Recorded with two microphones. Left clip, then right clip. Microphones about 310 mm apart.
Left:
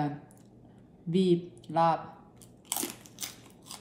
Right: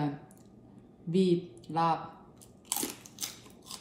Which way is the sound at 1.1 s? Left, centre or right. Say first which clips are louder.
Left 1 dB; centre.